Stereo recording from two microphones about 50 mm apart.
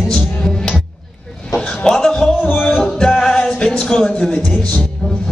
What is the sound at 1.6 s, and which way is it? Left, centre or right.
Music, centre.